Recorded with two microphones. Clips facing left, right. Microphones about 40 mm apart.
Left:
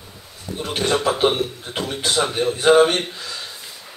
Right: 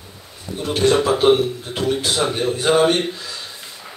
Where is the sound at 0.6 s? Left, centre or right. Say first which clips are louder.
Right 5 dB; centre.